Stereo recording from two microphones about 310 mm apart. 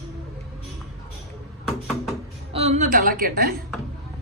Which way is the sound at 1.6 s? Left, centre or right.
Centre.